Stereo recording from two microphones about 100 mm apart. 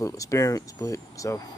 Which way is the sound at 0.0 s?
35° left (ahead or behind).